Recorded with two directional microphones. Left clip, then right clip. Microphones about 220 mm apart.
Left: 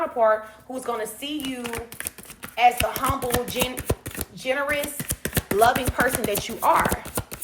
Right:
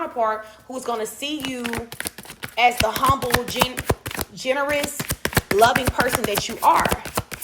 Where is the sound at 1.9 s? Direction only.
40° right (ahead or behind).